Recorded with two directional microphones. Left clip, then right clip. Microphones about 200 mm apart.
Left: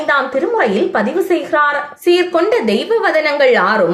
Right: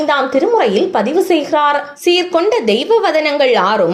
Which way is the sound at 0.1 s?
30° right (ahead or behind).